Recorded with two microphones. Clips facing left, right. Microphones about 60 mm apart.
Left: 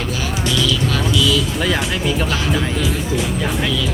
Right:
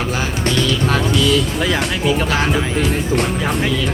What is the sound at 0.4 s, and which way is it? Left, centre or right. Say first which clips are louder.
Music: right 1 dB; right.